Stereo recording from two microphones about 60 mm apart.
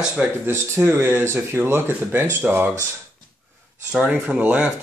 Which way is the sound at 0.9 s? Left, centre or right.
Right.